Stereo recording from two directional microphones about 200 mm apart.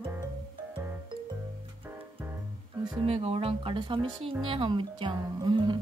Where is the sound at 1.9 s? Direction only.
10° right (ahead or behind).